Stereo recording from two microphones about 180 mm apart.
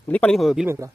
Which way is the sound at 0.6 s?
15° right (ahead or behind).